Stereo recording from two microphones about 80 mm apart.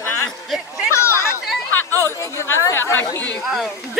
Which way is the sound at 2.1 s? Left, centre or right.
Left.